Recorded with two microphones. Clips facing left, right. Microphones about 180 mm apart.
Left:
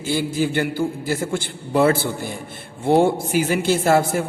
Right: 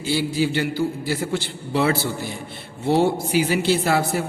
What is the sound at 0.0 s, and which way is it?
A man's voice, 50° left (ahead or behind).